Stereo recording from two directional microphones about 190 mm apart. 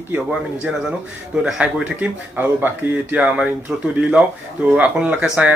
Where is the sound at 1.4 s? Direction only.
5° right (ahead or behind).